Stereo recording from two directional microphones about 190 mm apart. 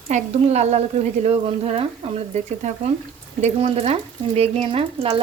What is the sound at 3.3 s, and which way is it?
Speech, 35° right (ahead or behind).